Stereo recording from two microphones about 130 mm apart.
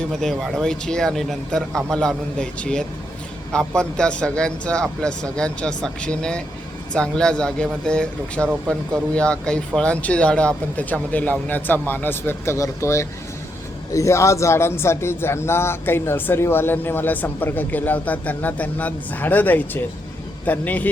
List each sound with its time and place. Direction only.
0.1 s speech: centre (ahead or behind)